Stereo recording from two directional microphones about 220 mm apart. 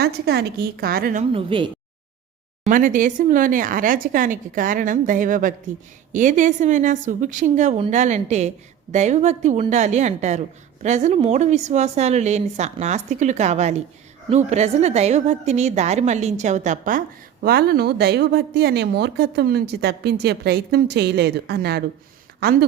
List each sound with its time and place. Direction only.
0.0 s a woman's voice: 45° right (ahead or behind)
1.3 s speech: 25° right (ahead or behind)
2.6 s a woman's voice: 35° right (ahead or behind)